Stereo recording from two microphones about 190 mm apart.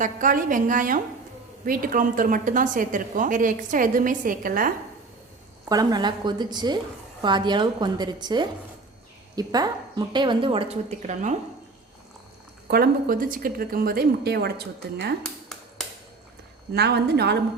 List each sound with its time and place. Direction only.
0.0 s a woman's voice: 45° right (ahead or behind)
5.6 s a woman's voice: 20° right (ahead or behind); by 11.3 s 40° right (ahead or behind)
12.7 s a woman's voice: 50° right (ahead or behind)
15.2 s a sound: 5° left (ahead or behind)
16.7 s a woman's voice: 60° right (ahead or behind)